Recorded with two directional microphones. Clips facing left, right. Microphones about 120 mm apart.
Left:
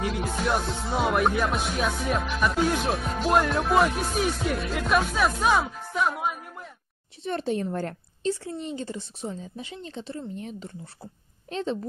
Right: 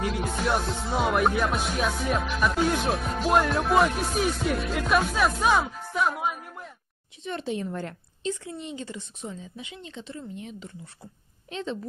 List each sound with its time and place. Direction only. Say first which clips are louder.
0.0 s music: even; centre (ahead or behind)
7.2 s a woman's voice: left 3 dB; 40° left (ahead or behind)